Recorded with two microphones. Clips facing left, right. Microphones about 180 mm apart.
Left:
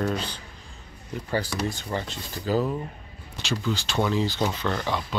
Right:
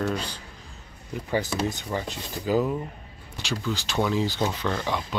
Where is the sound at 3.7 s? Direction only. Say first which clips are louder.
Even; 10° right (ahead or behind).